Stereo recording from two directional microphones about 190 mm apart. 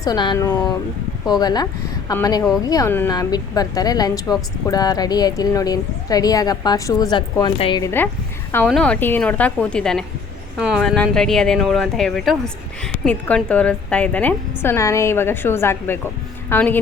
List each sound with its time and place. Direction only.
0.0 s a woman's voice: 20° left (ahead or behind)
7.9 s a woman's voice: 10° left (ahead or behind)